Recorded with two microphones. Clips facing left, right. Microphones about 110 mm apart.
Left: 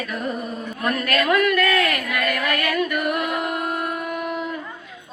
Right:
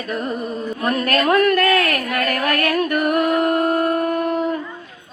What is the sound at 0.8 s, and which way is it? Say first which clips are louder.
A woman's voice: right 3 dB; 35° right (ahead or behind).